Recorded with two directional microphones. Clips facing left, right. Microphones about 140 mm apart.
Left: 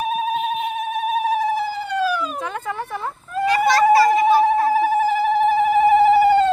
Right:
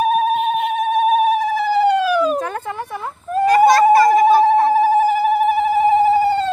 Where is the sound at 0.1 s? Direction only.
60° right (ahead or behind).